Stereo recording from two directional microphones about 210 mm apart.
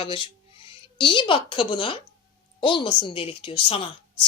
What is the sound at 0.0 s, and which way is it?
A woman's voice, 25° left (ahead or behind).